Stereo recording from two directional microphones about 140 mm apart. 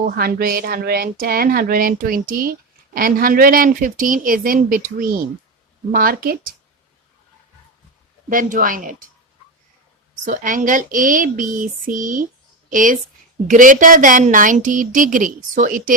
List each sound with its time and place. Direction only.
0.0 s speech: 90° right
8.3 s a woman's voice: 75° right (ahead or behind)
10.2 s a woman's voice: 70° right (ahead or behind)